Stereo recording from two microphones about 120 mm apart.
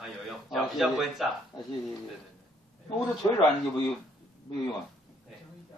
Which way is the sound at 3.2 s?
30° left (ahead or behind).